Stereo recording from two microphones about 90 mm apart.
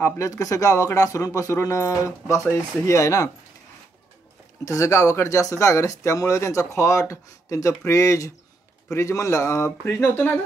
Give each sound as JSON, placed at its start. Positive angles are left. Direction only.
{"t": 0.0, "sound": "speech", "side_deg": 35}
{"t": 4.6, "sound": "speech", "side_deg": 35}
{"t": 9.8, "sound": "speech", "side_deg": 20}